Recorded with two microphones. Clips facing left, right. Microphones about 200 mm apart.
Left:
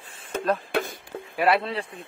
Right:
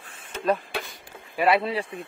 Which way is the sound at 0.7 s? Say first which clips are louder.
Left 7 dB; 50° left (ahead or behind).